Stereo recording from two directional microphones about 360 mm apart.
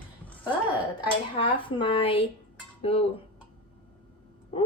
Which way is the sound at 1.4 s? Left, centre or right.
Centre.